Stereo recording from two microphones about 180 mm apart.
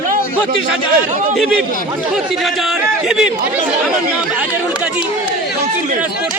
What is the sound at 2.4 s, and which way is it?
Speech, centre (ahead or behind).